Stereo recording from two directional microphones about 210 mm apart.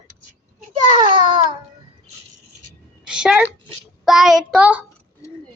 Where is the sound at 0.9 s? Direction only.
20° right (ahead or behind).